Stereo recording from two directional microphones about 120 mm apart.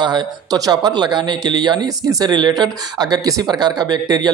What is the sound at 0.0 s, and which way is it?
Speech, 35° right (ahead or behind).